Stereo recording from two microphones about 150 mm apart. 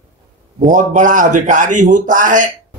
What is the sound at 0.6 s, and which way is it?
Speech, 60° right (ahead or behind).